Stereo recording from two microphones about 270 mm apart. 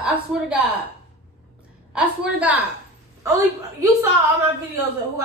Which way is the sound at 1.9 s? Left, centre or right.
Centre.